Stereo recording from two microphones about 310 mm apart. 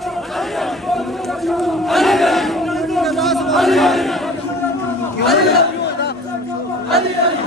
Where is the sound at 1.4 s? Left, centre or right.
Centre.